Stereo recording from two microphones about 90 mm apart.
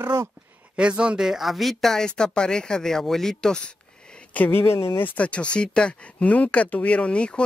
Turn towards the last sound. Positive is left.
turn(degrees=10)  # may be behind; listen again after turning